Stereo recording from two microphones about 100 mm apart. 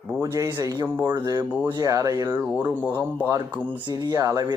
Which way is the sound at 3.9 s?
45° right (ahead or behind).